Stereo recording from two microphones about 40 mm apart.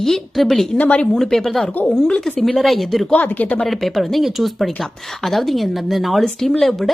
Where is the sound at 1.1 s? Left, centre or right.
Centre.